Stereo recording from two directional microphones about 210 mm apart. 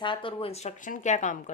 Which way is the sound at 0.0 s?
25° left (ahead or behind).